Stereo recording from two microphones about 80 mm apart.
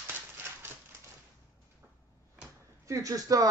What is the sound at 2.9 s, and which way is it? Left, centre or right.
Speech, right.